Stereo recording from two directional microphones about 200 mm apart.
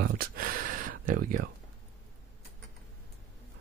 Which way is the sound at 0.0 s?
45° right (ahead or behind).